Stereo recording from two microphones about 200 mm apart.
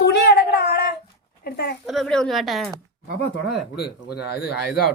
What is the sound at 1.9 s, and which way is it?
Speech, centre (ahead or behind).